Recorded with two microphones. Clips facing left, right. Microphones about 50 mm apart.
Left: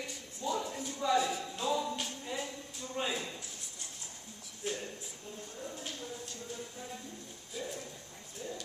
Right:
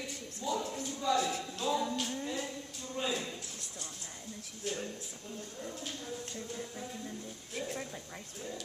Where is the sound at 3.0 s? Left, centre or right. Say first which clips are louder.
Even; centre.